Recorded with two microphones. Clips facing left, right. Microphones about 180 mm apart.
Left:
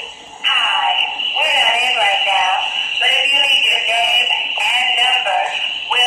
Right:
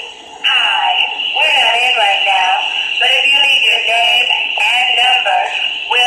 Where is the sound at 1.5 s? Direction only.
60° right (ahead or behind).